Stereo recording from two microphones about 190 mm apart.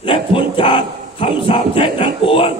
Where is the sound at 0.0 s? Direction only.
25° left (ahead or behind).